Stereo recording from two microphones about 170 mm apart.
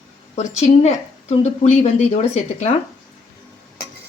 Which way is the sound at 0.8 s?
40° left (ahead or behind).